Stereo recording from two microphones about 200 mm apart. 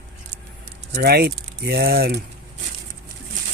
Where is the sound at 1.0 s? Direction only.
50° right (ahead or behind).